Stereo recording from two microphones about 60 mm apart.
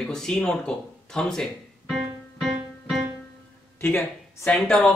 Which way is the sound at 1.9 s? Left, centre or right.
Centre.